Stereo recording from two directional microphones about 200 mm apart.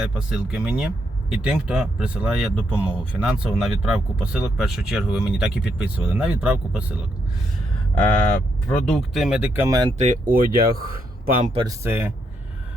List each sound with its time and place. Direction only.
0.0 s speech: 5° right (ahead or behind)
7.9 s speech: 5° left (ahead or behind); by 9.9 s 15° right (ahead or behind)
10.0 s speech: 40° right (ahead or behind)
11.6 s speech: 10° right (ahead or behind)